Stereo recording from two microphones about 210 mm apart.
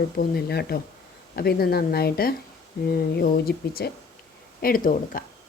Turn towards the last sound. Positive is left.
turn(degrees=40)  # may be behind; listen again after turning